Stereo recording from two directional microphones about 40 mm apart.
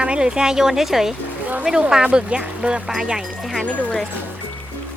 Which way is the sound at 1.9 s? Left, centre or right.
Right.